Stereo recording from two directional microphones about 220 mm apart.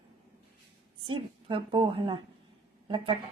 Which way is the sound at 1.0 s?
20° right (ahead or behind).